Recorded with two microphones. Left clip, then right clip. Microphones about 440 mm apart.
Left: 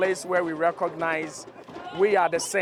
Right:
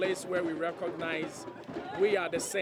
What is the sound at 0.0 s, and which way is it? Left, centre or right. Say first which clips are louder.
Speech: left 7 dB; left.